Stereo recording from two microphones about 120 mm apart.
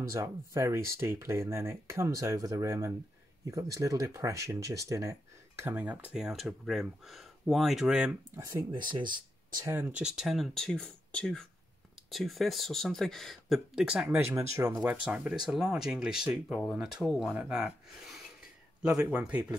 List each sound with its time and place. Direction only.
0.1 s speech: 25° right (ahead or behind)
5.6 s speech: 15° right (ahead or behind)
8.5 s speech: 35° right (ahead or behind)
9.7 s speech: 15° right (ahead or behind)
14.1 s speech: 20° right (ahead or behind)
15.0 s a man's voice: 5° right (ahead or behind)